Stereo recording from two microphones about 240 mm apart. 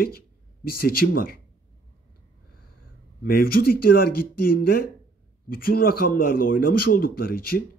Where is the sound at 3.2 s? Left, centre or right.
Left.